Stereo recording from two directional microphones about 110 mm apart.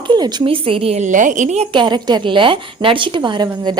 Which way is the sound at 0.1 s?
45° right (ahead or behind).